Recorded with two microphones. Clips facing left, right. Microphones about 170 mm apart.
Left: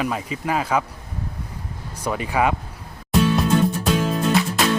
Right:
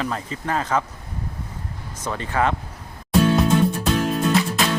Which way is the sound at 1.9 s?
10° left (ahead or behind).